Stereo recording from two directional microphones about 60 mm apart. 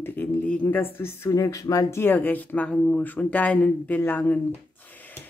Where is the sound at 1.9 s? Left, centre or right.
Left.